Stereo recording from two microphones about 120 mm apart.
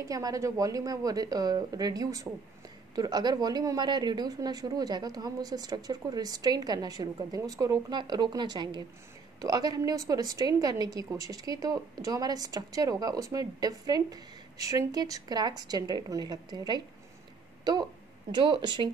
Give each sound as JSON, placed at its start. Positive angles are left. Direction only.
{"t": 0.0, "sound": "a woman's voice", "side_deg": -30}
{"t": 18.3, "sound": "a woman's voice", "side_deg": -40}